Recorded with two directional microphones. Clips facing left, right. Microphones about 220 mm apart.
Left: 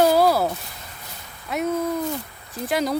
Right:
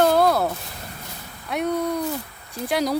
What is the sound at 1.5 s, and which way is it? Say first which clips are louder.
Speech: even; 5° left (ahead or behind).